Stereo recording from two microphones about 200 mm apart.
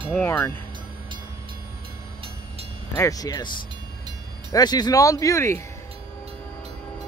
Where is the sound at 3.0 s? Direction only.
15° left (ahead or behind).